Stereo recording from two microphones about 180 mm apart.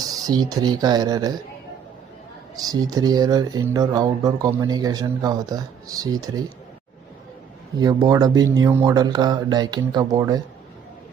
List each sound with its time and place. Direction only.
0.0 s speech: 20° right (ahead or behind)
2.6 s speech: 20° right (ahead or behind)
7.8 s speech: 20° right (ahead or behind)